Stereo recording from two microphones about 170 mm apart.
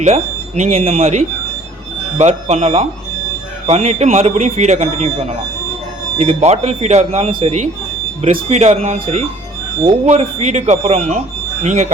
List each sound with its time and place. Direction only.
0.0 s speech: 40° right (ahead or behind)